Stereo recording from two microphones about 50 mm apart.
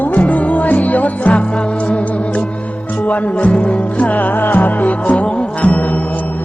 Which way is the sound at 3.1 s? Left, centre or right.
Left.